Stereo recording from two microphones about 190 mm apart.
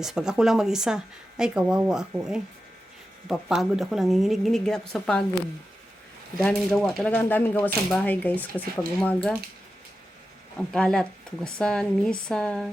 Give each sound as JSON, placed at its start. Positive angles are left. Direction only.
{"t": 0.0, "sound": "speech", "side_deg": -5}
{"t": 6.4, "sound": "speech", "side_deg": 5}
{"t": 10.6, "sound": "speech", "side_deg": 5}